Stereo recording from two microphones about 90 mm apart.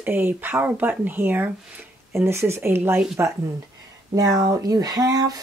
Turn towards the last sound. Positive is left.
turn(degrees=-45)  # may be behind; listen again after turning